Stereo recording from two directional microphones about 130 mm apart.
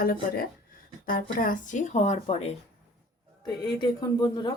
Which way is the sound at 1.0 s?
90° left.